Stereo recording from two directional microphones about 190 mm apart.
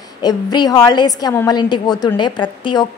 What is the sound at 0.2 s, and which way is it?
A woman's voice, 20° left (ahead or behind).